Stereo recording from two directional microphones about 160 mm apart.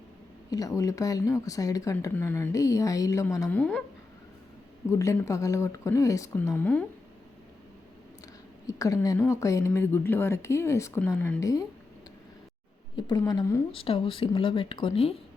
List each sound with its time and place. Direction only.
0.5 s speech: 20° left (ahead or behind)
3.6 s a woman's voice: 5° left (ahead or behind)
4.9 s speech: 20° left (ahead or behind)
8.6 s a woman's voice: 20° left (ahead or behind)
13.0 s speech: 25° left (ahead or behind)
13.7 s speech: 35° left (ahead or behind)